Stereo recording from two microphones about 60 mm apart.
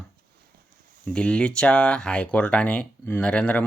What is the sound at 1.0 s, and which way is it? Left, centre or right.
Speech, centre.